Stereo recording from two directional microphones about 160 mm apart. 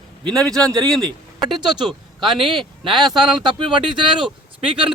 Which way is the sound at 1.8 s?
Centre (ahead or behind).